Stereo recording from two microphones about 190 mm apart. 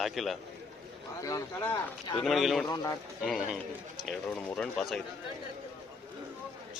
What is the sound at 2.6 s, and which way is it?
Speech, 20° left (ahead or behind).